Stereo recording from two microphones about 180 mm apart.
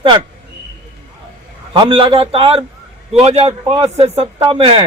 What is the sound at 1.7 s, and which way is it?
A man's voice, 30° right (ahead or behind).